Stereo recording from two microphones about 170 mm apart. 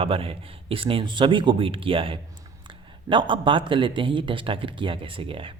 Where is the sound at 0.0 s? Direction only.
35° right (ahead or behind).